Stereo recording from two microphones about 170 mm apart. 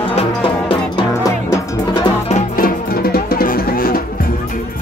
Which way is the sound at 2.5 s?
60° left (ahead or behind).